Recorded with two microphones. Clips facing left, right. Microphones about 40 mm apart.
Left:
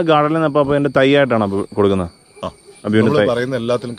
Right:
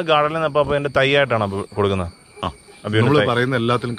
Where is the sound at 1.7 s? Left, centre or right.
Right.